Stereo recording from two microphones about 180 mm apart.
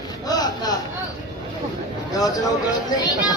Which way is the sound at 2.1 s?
20° left (ahead or behind).